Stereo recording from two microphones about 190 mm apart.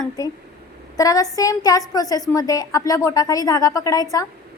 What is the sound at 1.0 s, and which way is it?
A woman's voice, 20° left (ahead or behind).